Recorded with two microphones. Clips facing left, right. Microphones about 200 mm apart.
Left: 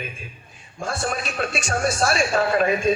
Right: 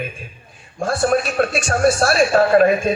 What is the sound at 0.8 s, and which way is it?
A man's voice, 50° right (ahead or behind).